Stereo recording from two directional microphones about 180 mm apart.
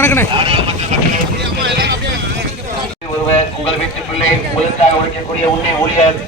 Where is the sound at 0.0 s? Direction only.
10° left (ahead or behind).